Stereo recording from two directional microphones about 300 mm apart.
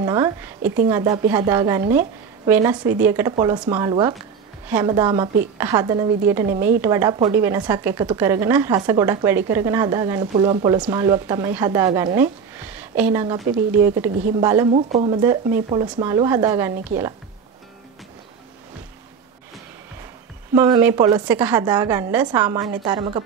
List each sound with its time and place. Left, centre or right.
0.0 s speech: centre
13.5 s speech: right
13.8 s speech: centre
20.5 s speech: centre